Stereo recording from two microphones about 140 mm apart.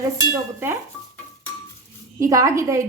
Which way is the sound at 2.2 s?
20° right (ahead or behind).